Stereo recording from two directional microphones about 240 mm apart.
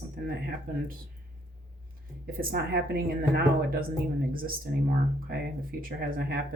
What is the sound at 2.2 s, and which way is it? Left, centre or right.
Speech, right.